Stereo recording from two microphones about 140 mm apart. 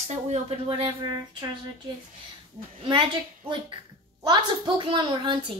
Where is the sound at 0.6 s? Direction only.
35° right (ahead or behind).